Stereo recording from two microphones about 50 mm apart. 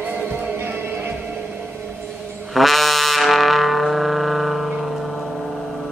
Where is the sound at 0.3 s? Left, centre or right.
Right.